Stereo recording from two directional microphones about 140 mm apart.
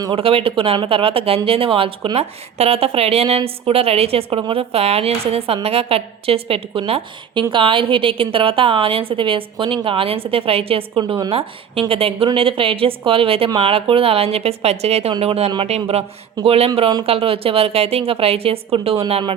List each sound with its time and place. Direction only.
0.0 s a woman's voice: 40° right (ahead or behind)